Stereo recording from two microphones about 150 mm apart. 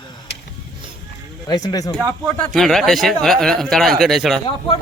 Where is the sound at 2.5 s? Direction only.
Centre (ahead or behind).